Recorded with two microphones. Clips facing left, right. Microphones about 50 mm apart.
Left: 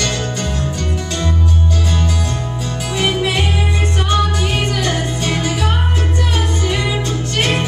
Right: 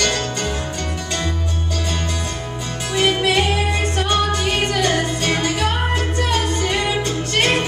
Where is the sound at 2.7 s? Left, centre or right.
Centre.